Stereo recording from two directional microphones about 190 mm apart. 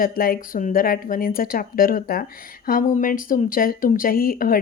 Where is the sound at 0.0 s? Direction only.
50° left (ahead or behind).